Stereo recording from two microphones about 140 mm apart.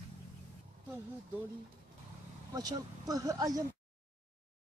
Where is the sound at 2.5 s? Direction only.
25° right (ahead or behind).